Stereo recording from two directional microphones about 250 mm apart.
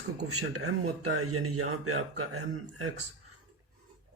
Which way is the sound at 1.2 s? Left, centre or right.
Right.